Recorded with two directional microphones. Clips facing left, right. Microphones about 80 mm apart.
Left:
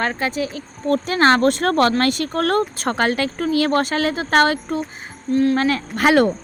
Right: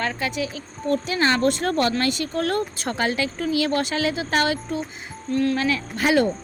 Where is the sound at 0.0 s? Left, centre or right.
Left.